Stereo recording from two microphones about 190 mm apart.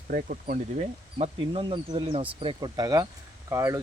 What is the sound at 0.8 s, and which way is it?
Speech, 35° right (ahead or behind).